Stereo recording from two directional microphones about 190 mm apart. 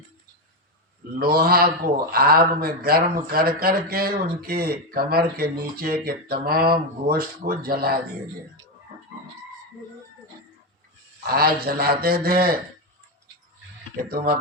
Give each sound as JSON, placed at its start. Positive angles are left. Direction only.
{"t": 1.2, "sound": "speech", "side_deg": -55}
{"t": 11.3, "sound": "speech", "side_deg": -50}
{"t": 13.9, "sound": "speech", "side_deg": -50}